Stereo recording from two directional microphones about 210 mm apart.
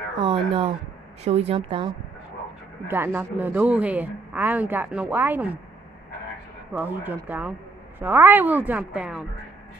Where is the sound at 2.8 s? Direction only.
10° right (ahead or behind).